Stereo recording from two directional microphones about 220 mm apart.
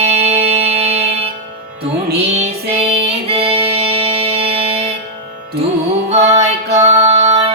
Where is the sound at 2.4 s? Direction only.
25° right (ahead or behind).